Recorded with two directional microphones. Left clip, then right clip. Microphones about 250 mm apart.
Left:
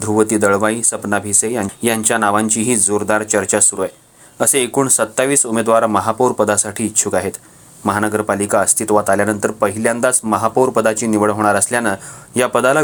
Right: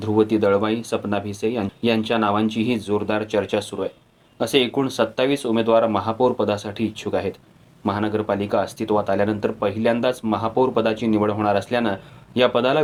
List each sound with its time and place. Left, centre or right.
0.0 s speech: left